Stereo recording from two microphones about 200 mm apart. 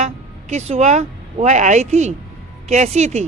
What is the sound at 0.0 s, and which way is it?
Speech, 35° right (ahead or behind).